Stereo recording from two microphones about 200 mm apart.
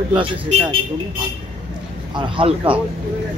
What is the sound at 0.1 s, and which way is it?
Speech, 25° right (ahead or behind).